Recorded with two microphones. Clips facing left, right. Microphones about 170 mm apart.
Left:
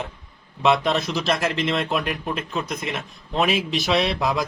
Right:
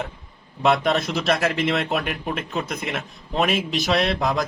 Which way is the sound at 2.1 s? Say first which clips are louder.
Even; 5° right (ahead or behind).